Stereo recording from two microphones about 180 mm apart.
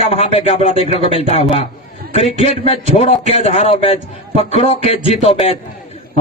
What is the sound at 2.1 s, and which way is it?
A man's voice, 35° left (ahead or behind).